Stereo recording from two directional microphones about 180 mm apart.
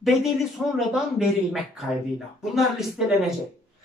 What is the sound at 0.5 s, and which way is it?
Speech, centre (ahead or behind).